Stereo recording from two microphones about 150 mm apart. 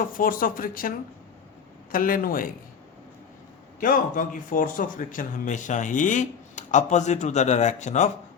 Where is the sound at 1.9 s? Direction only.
70° left (ahead or behind).